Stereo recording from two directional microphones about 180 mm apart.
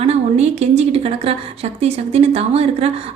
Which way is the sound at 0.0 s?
35° right (ahead or behind).